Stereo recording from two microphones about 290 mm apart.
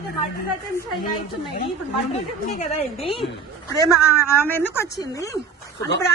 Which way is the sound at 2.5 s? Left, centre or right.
Left.